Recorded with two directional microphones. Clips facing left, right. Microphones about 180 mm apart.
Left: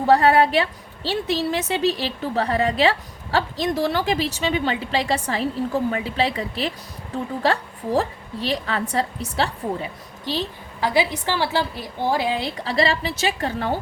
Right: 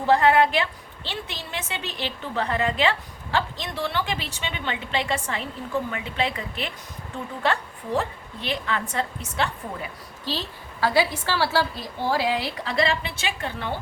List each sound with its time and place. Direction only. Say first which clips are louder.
0.1 s a woman's voice: left 2 dB; 40° left (ahead or behind)
10.2 s a woman's voice: left 4 dB; 15° left (ahead or behind)
12.6 s a woman's voice: left 4 dB; 35° left (ahead or behind)